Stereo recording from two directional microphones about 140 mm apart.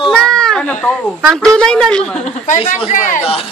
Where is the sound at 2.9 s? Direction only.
65° left (ahead or behind).